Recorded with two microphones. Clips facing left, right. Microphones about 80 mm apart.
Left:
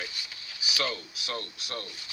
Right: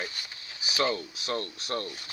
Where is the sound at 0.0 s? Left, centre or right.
Right.